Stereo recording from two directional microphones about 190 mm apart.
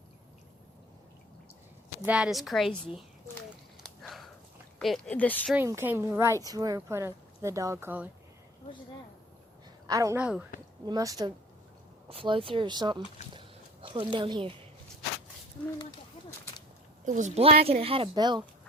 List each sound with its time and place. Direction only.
2.0 s speech: 5° right (ahead or behind)
3.8 s a sound: centre (ahead or behind)
4.8 s speech: centre (ahead or behind)
5.5 s speech: 15° right (ahead or behind)
9.8 s a woman's voice: 15° right (ahead or behind)
10.2 s speech: 5° right (ahead or behind)
10.8 s speech: 20° right (ahead or behind)
17.1 s speech: 40° right (ahead or behind); by 18.4 s 20° right (ahead or behind)